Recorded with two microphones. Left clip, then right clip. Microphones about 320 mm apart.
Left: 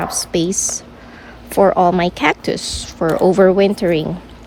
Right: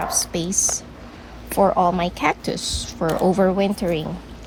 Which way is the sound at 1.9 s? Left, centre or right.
Left.